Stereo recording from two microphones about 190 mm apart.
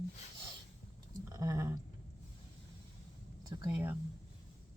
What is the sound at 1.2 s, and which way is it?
Speech, 15° right (ahead or behind).